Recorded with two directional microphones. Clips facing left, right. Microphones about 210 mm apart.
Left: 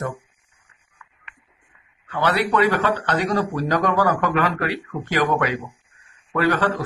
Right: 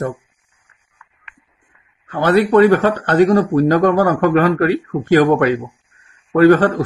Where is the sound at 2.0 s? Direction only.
45° right (ahead or behind).